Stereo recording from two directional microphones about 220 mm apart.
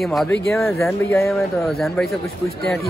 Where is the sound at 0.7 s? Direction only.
15° left (ahead or behind).